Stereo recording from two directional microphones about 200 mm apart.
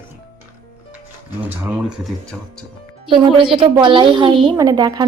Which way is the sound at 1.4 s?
5° right (ahead or behind).